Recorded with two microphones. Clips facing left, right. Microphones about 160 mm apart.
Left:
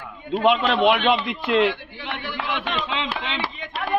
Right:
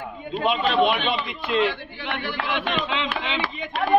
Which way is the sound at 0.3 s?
80° left.